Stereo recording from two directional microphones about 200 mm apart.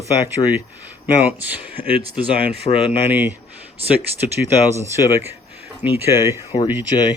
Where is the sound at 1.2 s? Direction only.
10° right (ahead or behind).